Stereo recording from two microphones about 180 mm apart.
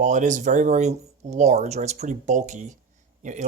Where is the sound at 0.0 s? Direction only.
45° right (ahead or behind).